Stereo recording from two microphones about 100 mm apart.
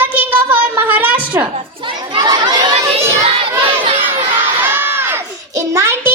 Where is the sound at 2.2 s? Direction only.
45° right (ahead or behind).